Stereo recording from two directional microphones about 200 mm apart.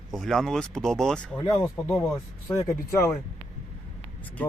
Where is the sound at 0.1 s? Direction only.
Centre (ahead or behind).